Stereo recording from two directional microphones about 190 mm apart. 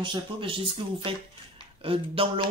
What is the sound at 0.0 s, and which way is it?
Speech, 25° right (ahead or behind).